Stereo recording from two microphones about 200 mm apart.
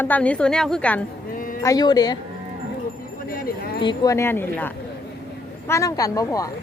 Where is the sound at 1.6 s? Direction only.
20° left (ahead or behind).